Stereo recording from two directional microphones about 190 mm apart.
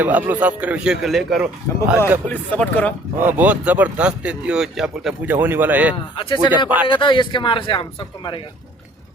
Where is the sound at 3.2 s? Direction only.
10° right (ahead or behind).